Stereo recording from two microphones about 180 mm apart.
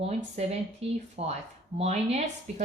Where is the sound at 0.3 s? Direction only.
35° right (ahead or behind).